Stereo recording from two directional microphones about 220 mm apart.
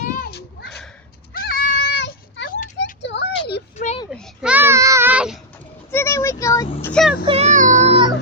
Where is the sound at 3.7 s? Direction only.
30° left (ahead or behind).